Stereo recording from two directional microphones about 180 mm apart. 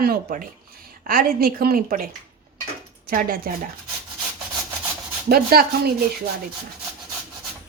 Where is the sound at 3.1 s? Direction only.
50° right (ahead or behind).